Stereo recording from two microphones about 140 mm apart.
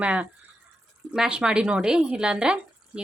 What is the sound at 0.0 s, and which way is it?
Speech, 10° right (ahead or behind).